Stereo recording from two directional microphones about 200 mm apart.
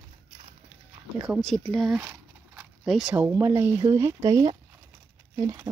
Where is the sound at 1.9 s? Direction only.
15° right (ahead or behind).